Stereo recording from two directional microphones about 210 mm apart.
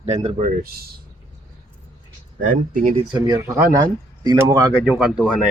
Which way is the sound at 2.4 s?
40° right (ahead or behind).